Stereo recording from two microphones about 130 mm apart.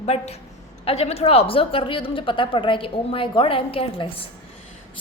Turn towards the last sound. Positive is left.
turn(degrees=45)  # may be behind; listen again after turning